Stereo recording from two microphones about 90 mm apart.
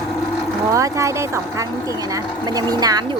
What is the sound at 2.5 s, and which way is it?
Speech, 45° right (ahead or behind).